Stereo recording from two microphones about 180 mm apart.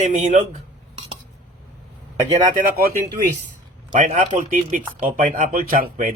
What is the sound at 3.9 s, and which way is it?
Speech, 45° right (ahead or behind).